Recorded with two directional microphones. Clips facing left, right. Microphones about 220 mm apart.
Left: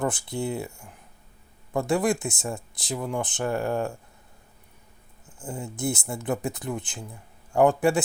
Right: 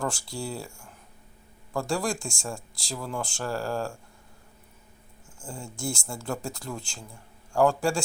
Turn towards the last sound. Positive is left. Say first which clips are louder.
# left 3 dB
turn(degrees=20)  # may be behind; listen again after turning